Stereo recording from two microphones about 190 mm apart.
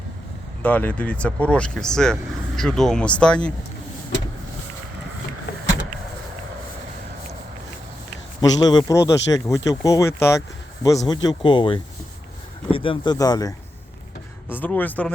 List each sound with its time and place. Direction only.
0.6 s speech: 10° left (ahead or behind)
8.4 s speech: 20° left (ahead or behind)
14.6 s speech: 10° left (ahead or behind)